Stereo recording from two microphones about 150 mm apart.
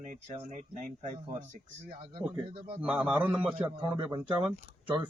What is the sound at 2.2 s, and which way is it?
Speech, 35° right (ahead or behind).